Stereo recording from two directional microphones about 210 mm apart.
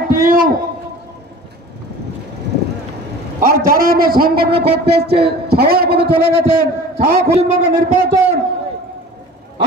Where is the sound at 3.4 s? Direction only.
45° right (ahead or behind).